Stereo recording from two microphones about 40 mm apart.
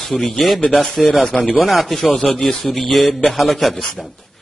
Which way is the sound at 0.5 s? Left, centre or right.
Centre.